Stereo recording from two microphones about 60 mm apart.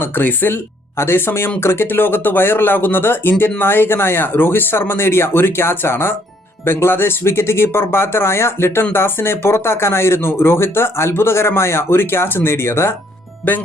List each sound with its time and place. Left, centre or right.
0.0 s speech: left
13.5 s speech: left